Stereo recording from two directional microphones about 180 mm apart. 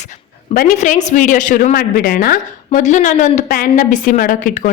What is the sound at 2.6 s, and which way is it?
A woman's voice, 40° left (ahead or behind).